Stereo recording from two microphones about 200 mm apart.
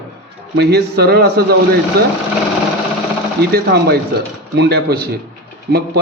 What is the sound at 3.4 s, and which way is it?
A man's voice, 50° right (ahead or behind).